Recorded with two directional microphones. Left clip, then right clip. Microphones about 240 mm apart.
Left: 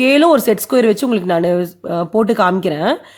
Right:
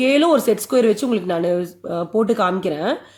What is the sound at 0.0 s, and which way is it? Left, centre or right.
Speech, left.